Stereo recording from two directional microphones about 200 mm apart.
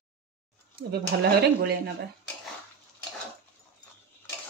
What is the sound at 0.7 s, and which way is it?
A woman's voice, 50° right (ahead or behind).